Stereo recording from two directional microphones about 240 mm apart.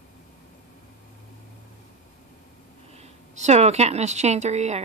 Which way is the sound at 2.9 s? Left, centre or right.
Right.